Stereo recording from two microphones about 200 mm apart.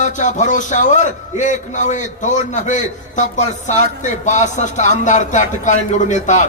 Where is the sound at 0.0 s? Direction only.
40° left (ahead or behind).